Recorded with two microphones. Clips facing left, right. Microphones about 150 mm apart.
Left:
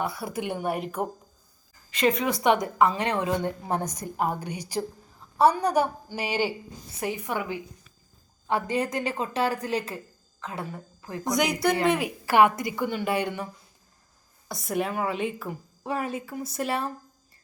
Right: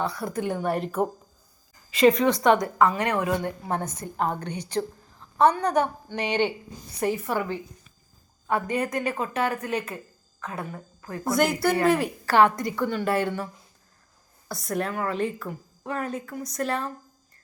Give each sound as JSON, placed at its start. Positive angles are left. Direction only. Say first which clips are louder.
{"t": 0.0, "sound": "a woman's voice", "louder": "right 2 dB", "side_deg": 5}
{"t": 2.4, "sound": "a woman's voice", "louder": "left 1 dB", "side_deg": 15}
{"t": 8.4, "sound": "a woman's voice", "louder": "even", "side_deg": 25}
{"t": 11.2, "sound": "a woman's voice", "louder": "right 2 dB", "side_deg": -5}
{"t": 12.2, "sound": "a woman's voice", "louder": "left 1 dB", "side_deg": 15}
{"t": 14.4, "sound": "a woman's voice", "louder": "even", "side_deg": 0}
{"t": 15.4, "sound": "a woman's voice", "louder": "left 1 dB", "side_deg": 15}